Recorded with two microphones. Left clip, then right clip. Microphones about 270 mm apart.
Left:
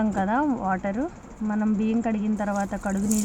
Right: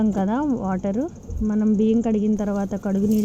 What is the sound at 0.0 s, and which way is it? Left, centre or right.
Speech, centre.